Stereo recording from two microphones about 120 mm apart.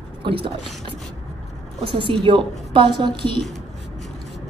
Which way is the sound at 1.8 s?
45° right (ahead or behind).